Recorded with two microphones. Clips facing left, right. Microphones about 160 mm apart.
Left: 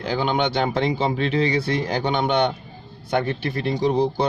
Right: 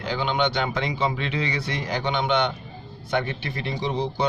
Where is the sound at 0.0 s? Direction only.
40° left (ahead or behind).